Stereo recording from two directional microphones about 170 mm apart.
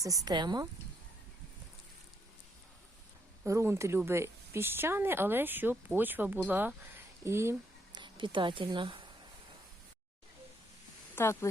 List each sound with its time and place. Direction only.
0.0 s speech: 20° right (ahead or behind)
3.4 s speech: 15° right (ahead or behind)
7.9 s a woman's voice: 30° right (ahead or behind)
11.1 s speech: 15° left (ahead or behind)